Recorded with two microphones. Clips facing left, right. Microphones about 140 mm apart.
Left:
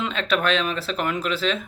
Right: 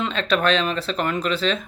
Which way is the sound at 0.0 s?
5° left (ahead or behind).